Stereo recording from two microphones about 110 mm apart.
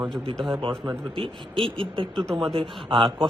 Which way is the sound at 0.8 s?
50° right (ahead or behind).